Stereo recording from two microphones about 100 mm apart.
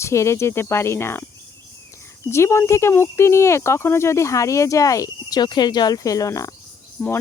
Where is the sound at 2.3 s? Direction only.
25° left (ahead or behind).